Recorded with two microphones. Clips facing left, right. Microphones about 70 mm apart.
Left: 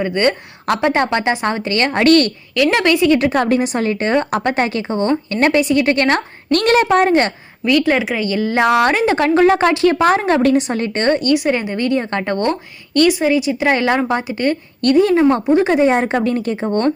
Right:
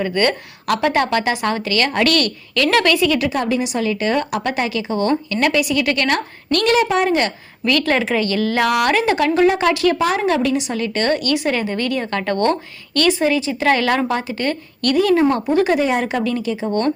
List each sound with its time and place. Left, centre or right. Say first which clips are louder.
0.0 s a woman's voice: left 2 dB; left
2.6 s a woman's voice: left 2 dB; centre
3.3 s a woman's voice: left 4 dB; left
7.6 s a woman's voice: left 3 dB; centre; by 16.9 s left